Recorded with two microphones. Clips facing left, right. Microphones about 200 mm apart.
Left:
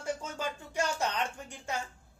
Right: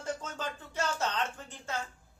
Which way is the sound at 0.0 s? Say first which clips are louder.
Left 2 dB; 10° left (ahead or behind).